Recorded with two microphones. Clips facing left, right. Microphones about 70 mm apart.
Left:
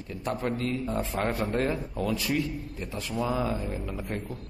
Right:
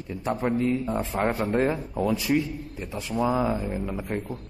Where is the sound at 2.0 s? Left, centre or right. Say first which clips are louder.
Right 5 dB; centre.